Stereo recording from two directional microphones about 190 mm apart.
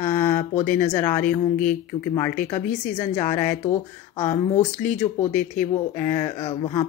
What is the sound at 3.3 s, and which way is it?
Speech, 10° left (ahead or behind).